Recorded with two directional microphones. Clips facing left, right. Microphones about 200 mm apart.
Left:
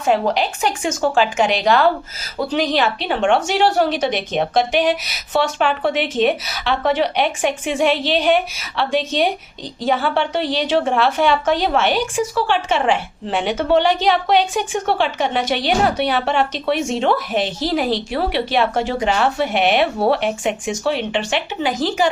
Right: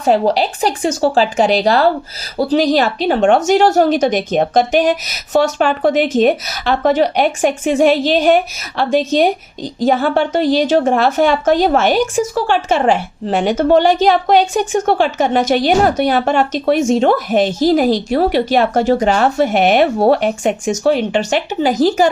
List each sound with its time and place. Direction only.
0.0 s a woman's voice: 35° right (ahead or behind)